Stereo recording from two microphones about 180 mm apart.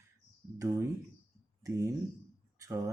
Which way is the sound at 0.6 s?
15° right (ahead or behind).